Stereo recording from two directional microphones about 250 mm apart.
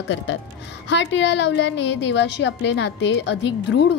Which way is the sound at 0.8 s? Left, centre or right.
Left.